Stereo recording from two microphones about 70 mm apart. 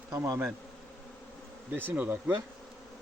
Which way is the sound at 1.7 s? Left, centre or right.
Right.